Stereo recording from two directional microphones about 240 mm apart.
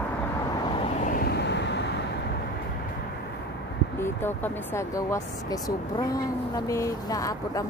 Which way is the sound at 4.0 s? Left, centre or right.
Centre.